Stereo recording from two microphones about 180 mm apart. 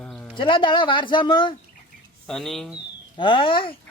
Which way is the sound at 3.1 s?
30° left (ahead or behind).